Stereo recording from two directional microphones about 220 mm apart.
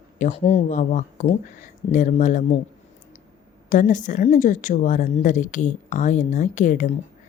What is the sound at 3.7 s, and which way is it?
A woman's voice, 35° left (ahead or behind).